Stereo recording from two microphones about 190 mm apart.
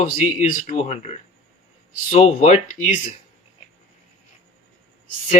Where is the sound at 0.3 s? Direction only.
40° left (ahead or behind).